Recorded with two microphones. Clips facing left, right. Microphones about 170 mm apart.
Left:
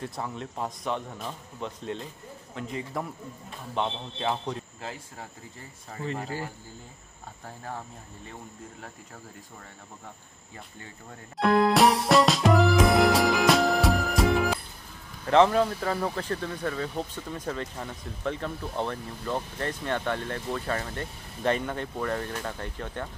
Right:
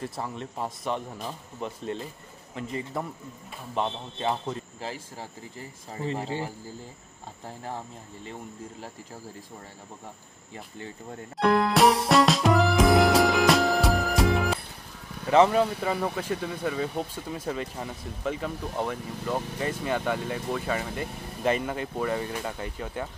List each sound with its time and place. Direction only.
0.0 s a man's voice: centre (ahead or behind)
5.9 s speech: 25° right (ahead or behind)
11.3 s music: centre (ahead or behind)
15.2 s speech: 5° right (ahead or behind)